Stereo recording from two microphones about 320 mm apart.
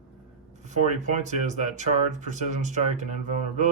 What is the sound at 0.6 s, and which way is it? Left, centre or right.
Speech, right.